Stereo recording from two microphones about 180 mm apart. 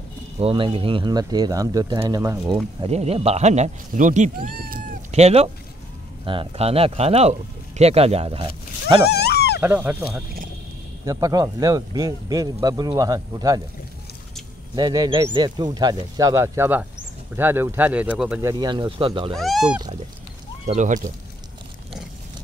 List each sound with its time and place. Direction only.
0.4 s a man's voice: 30° right (ahead or behind)
2.8 s speech: 35° right (ahead or behind)
4.5 s cat: 50° right (ahead or behind)
5.1 s speech: 35° right (ahead or behind)
9.1 s dog: 65° left (ahead or behind)
9.6 s a man's voice: 10° right (ahead or behind)
14.8 s a man's voice: 20° right (ahead or behind); by 18.4 s 5° right (ahead or behind)
18.4 s a man's voice: 20° right (ahead or behind)
19.3 s speech: centre (ahead or behind)
20.6 s speech: 40° right (ahead or behind)